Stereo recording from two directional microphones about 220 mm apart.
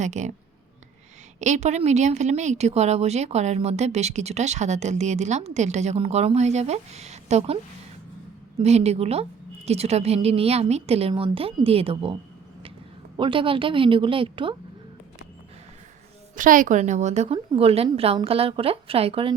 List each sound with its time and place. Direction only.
0.0 s a woman's voice: 30° right (ahead or behind)
1.4 s a woman's voice: 30° right (ahead or behind)
13.1 s a woman's voice: 25° right (ahead or behind)
16.3 s a woman's voice: 35° right (ahead or behind)